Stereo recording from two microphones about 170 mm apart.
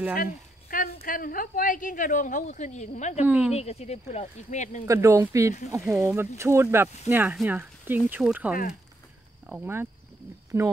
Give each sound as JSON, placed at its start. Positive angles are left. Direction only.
{"t": 0.2, "sound": "a sound", "side_deg": 55}
{"t": 1.0, "sound": "a woman's voice", "side_deg": 55}
{"t": 3.3, "sound": "speech", "side_deg": -5}
{"t": 3.5, "sound": "speech", "side_deg": 40}
{"t": 4.8, "sound": "speech", "side_deg": -15}